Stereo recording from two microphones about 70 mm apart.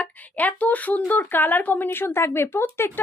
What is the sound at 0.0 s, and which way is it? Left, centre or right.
A woman's voice, left.